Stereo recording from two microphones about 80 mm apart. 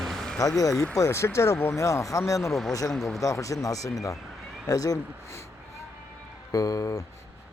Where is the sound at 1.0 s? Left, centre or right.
Left.